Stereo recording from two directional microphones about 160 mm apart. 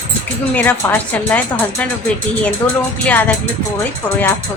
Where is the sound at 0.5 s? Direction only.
10° left (ahead or behind).